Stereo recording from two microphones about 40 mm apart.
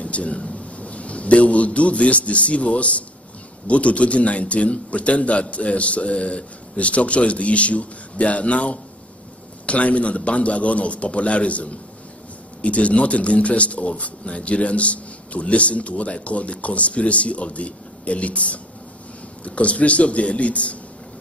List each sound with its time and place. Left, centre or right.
0.0 s a man's voice: left